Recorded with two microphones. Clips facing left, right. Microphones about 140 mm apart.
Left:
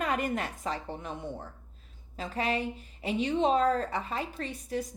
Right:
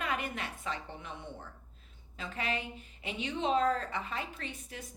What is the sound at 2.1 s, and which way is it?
Speech, 35° left (ahead or behind).